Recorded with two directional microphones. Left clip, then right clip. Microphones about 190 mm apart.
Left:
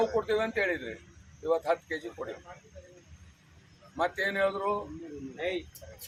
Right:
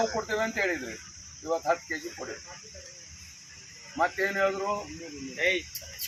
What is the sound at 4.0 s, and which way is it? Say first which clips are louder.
Speech: right 2 dB; 15° left (ahead or behind).